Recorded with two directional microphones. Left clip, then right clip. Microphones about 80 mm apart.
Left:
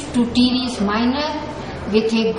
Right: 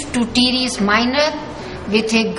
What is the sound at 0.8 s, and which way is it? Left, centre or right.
Speech, right.